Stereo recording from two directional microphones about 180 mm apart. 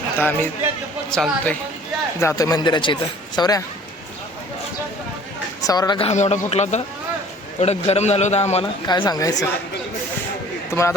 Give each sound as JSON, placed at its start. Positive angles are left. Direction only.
{"t": 0.2, "sound": "speech", "side_deg": 10}
{"t": 2.1, "sound": "speech", "side_deg": 15}
{"t": 5.6, "sound": "speech", "side_deg": 20}
{"t": 6.1, "sound": "a man's voice", "side_deg": 40}
{"t": 8.9, "sound": "speech", "side_deg": 25}
{"t": 10.7, "sound": "a man's voice", "side_deg": 15}